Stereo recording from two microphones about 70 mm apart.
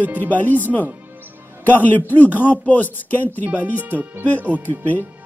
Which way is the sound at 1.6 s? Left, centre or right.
Left.